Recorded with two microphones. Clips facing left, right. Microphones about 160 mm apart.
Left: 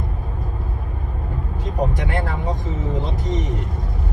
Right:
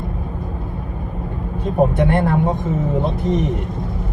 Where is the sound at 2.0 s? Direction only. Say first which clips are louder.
Right 9 dB; 55° right (ahead or behind).